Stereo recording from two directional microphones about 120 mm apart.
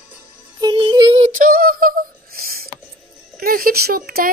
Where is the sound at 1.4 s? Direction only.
90° right.